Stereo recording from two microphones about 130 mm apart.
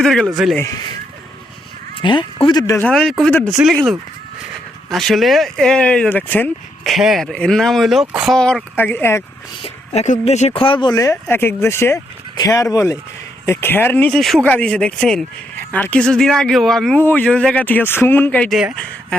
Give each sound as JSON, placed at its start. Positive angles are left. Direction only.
{"t": 0.0, "sound": "speech", "side_deg": 5}
{"t": 0.6, "sound": "speech", "side_deg": 30}
{"t": 2.0, "sound": "speech", "side_deg": 40}
{"t": 2.7, "sound": "speech", "side_deg": 5}
{"t": 3.6, "sound": "speech", "side_deg": -10}
{"t": 4.9, "sound": "speech", "side_deg": 0}
{"t": 6.8, "sound": "speech", "side_deg": 0}
{"t": 8.7, "sound": "speech", "side_deg": 15}
{"t": 9.6, "sound": "speech", "side_deg": 55}
{"t": 10.6, "sound": "speech", "side_deg": 40}
{"t": 14.1, "sound": "speech", "side_deg": 5}
{"t": 17.0, "sound": "speech", "side_deg": 15}